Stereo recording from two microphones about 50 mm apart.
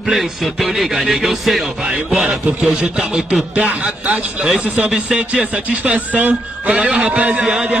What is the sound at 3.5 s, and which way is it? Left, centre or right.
A man's voice, right.